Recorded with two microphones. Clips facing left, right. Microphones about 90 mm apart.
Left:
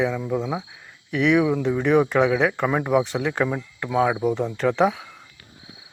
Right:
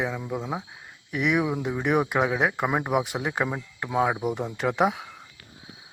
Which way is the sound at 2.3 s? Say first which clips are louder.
Left 4 dB; 25° right (ahead or behind).